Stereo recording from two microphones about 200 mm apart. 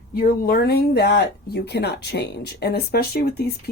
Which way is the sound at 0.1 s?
50° left (ahead or behind).